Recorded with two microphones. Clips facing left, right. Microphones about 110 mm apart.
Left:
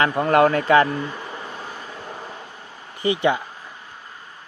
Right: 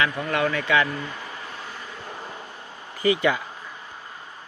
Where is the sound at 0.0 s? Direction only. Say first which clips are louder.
Left 7 dB; 45° left (ahead or behind).